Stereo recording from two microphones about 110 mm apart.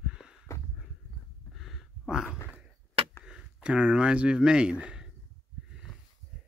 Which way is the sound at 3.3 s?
5° right (ahead or behind).